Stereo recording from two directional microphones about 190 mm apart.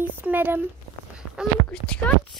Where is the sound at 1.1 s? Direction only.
5° right (ahead or behind).